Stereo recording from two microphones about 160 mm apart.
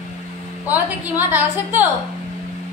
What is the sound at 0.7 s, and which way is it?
A woman's voice, 10° right (ahead or behind).